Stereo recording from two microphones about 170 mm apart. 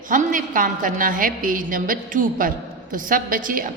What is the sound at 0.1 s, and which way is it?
A woman's voice, 50° right (ahead or behind).